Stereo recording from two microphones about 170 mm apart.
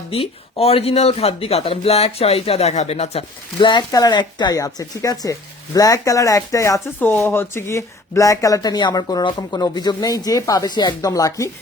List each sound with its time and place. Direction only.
0.1 s speech: 35° left (ahead or behind); by 11.5 s 20° left (ahead or behind)